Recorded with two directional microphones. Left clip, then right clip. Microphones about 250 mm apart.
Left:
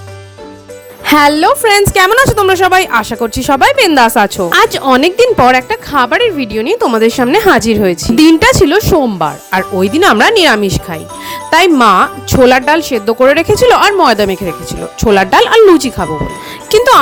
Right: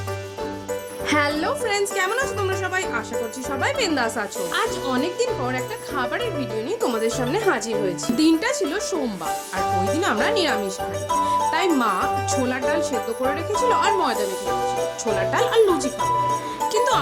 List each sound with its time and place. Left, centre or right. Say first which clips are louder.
1.0 s speech: left 15 dB; left
15.3 s speech: left 12 dB; left